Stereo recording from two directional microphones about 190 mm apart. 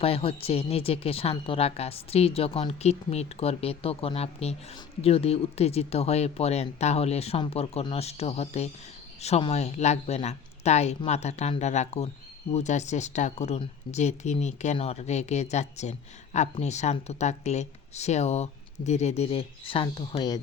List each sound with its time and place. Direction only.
0.0 s speech: 30° left (ahead or behind)